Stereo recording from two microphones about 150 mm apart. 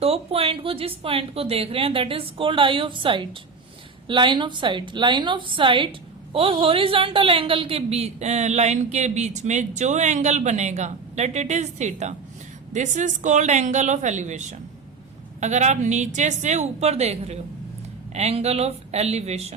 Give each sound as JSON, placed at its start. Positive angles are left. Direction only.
{"t": 0.0, "sound": "a woman's voice", "side_deg": -40}